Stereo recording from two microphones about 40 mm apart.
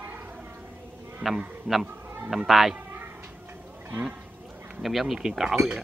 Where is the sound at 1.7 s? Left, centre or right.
Right.